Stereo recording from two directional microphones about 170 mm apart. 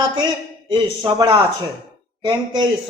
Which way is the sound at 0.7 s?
25° right (ahead or behind).